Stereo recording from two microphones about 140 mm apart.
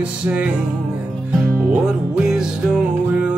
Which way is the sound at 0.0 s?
10° right (ahead or behind).